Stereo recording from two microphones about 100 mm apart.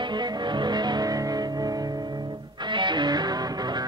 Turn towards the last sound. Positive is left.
turn(degrees=-45)  # may be behind; listen again after turning